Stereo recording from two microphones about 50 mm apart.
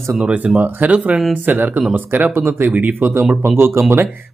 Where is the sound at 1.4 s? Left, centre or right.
Right.